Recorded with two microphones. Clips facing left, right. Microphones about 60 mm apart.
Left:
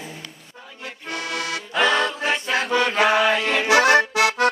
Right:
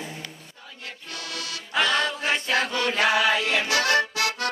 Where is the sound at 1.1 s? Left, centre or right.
Left.